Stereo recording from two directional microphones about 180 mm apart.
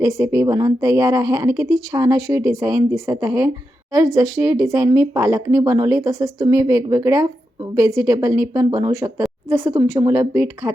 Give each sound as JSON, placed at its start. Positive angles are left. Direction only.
{"t": 0.0, "sound": "speech", "side_deg": -15}